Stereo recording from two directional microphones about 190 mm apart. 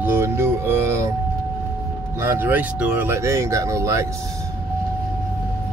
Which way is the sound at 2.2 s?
10° right (ahead or behind).